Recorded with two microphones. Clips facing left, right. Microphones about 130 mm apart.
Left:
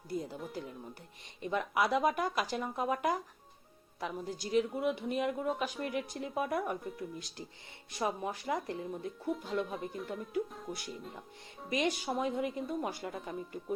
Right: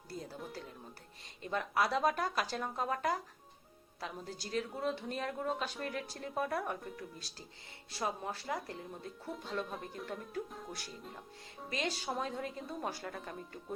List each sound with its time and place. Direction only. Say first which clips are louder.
0.1 s speech: left 6 dB; 15° left (ahead or behind)
9.3 s speech: left 4 dB; 5° left (ahead or behind)
10.7 s speech: left 5 dB; 15° left (ahead or behind)